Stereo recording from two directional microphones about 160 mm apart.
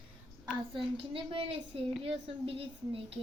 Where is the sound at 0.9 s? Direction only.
35° right (ahead or behind).